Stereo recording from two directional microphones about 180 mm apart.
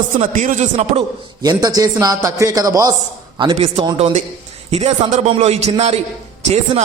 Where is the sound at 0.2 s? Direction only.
45° right (ahead or behind).